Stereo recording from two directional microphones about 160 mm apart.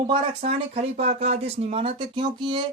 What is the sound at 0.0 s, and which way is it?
Speech, 40° right (ahead or behind).